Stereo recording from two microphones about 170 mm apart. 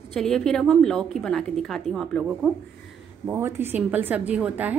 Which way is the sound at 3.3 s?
15° right (ahead or behind).